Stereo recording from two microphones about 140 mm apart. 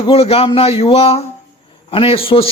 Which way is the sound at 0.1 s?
45° left (ahead or behind).